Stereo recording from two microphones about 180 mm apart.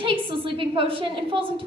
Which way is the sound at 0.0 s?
30° right (ahead or behind).